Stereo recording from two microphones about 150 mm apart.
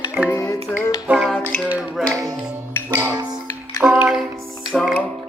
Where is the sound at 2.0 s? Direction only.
25° right (ahead or behind).